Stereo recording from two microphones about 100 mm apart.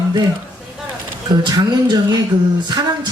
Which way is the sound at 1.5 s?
45° right (ahead or behind).